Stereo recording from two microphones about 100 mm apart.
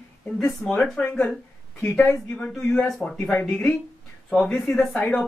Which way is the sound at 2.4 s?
5° left (ahead or behind).